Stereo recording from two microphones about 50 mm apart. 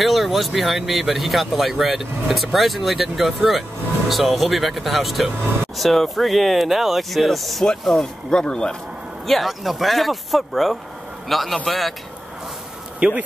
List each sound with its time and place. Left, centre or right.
0.0 s speech: centre
9.2 s speech: centre
13.0 s speech: centre